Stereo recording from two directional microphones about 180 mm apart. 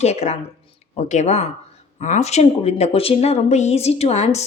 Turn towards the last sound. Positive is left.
turn(degrees=35)  # may be behind; listen again after turning